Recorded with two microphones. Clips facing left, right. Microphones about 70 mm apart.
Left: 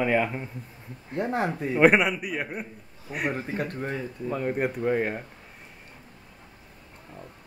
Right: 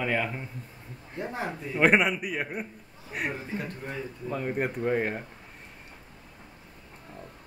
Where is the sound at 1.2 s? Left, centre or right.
Left.